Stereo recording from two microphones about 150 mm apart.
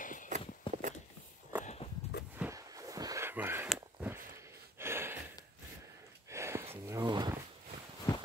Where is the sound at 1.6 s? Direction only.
45° left (ahead or behind).